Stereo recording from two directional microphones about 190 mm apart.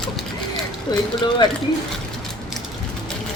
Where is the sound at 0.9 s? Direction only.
20° left (ahead or behind).